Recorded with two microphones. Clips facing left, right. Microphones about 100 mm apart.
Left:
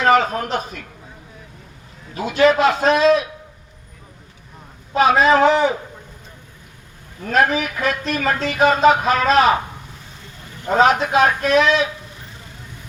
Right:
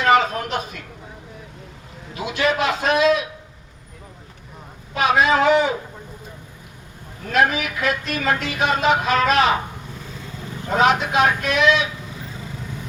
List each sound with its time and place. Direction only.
0.0 s speech: 40° left (ahead or behind)
2.2 s speech: 40° left (ahead or behind)
4.9 s speech: 35° left (ahead or behind)
7.3 s speech: 35° left (ahead or behind)
10.8 s speech: 35° left (ahead or behind)